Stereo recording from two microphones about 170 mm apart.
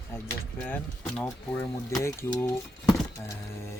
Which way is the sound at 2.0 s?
20° left (ahead or behind).